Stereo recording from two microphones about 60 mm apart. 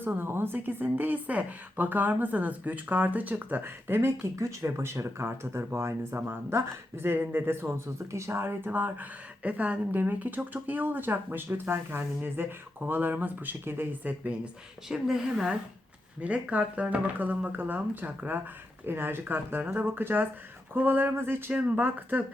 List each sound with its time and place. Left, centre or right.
0.0 s a woman's voice: right
4.4 s speech: right
9.9 s a woman's voice: right
14.8 s a woman's voice: centre
16.2 s a woman's voice: right
21.6 s speech: right